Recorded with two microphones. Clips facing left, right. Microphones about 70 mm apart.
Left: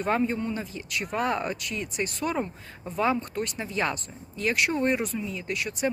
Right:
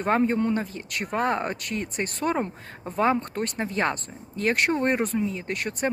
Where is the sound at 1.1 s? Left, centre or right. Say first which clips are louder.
Right 2 dB; right.